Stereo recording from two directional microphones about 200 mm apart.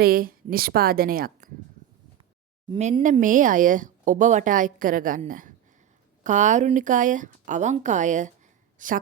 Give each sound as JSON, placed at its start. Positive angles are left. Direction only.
{"t": 0.0, "sound": "a woman's voice", "side_deg": -45}
{"t": 2.6, "sound": "speech", "side_deg": -30}